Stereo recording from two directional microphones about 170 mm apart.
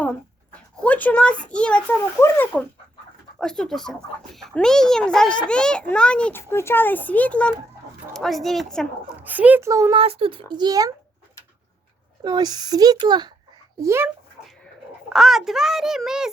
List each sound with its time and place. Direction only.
0.8 s a child's voice: 10° left (ahead or behind)
9.2 s a child's voice: 10° right (ahead or behind)
9.9 s speech: 35° right (ahead or behind)
12.2 s a child's voice: 25° right (ahead or behind)
15.1 s a child's voice: centre (ahead or behind)